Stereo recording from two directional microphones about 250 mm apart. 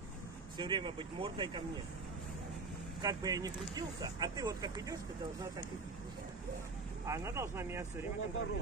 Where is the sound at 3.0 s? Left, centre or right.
Centre.